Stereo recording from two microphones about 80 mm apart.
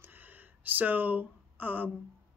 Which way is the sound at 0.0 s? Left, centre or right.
Right.